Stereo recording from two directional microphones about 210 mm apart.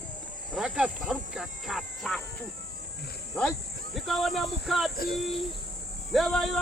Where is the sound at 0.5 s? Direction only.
Centre (ahead or behind).